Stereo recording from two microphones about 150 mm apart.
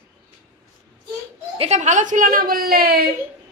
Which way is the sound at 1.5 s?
45° right (ahead or behind).